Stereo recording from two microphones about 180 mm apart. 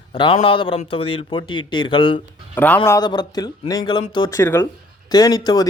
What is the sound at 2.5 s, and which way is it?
Speech, 10° left (ahead or behind).